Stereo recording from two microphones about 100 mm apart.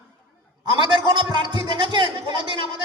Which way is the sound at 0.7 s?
50° right (ahead or behind).